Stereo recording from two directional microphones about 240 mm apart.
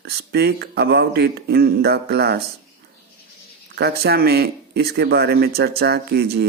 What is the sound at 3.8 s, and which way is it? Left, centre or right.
Speech, right.